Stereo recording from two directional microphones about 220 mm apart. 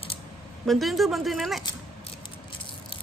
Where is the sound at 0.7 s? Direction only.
Centre (ahead or behind).